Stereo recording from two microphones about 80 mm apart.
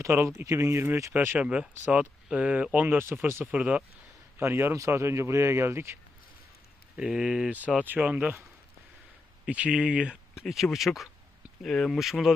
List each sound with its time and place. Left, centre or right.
0.0 s speech: right
0.4 s speech: right
1.4 s speech: centre
4.4 s speech: right
6.9 s speech: centre
9.5 s speech: centre
11.9 s speech: centre